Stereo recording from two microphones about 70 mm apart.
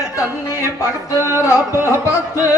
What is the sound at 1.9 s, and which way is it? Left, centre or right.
Music, left.